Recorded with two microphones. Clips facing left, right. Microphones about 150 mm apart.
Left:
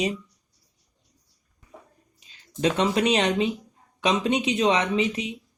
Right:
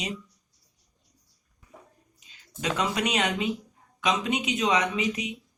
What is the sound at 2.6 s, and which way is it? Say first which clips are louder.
Speech: left 6 dB; 30° left (ahead or behind).